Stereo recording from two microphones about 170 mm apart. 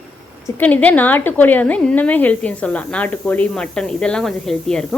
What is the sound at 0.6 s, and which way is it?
A woman's voice, 10° left (ahead or behind).